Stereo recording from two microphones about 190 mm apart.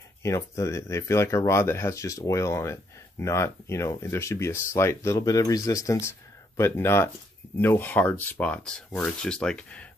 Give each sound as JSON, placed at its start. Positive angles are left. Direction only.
{"t": 0.2, "sound": "speech", "side_deg": 15}